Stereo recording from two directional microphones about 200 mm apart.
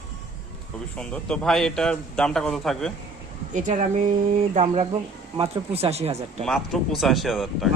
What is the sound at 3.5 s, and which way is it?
Speech, 40° right (ahead or behind).